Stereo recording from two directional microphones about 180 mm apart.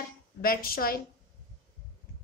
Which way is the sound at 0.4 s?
55° left (ahead or behind).